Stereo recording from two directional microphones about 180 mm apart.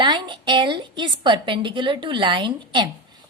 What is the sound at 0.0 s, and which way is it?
A woman's voice, 25° right (ahead or behind).